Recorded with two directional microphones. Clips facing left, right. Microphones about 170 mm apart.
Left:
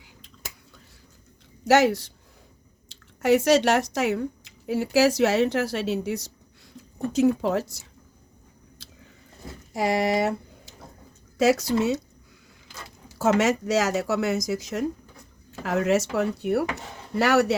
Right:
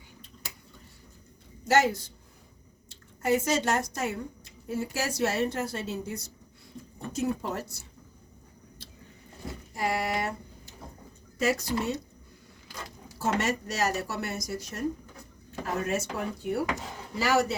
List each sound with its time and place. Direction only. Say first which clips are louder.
1.6 s speech: left 5 dB; 70° left (ahead or behind); by 7.9 s 90° left
9.7 s speech: left 7 dB; 85° left
13.1 s speech: left 7 dB; 90° left; by 17.6 s 70° left (ahead or behind)